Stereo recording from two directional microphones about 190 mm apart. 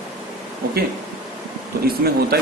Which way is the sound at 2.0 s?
55° right (ahead or behind).